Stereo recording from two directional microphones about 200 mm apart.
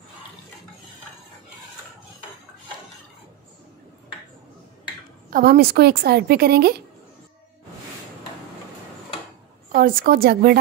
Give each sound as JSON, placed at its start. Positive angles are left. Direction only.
{"t": 5.3, "sound": "a woman's voice", "side_deg": -50}
{"t": 9.8, "sound": "a woman's voice", "side_deg": -45}